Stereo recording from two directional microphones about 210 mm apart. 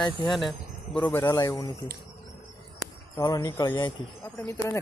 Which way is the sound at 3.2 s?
15° left (ahead or behind).